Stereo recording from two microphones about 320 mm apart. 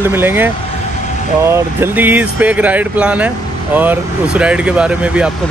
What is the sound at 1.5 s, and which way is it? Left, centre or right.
Speech, centre.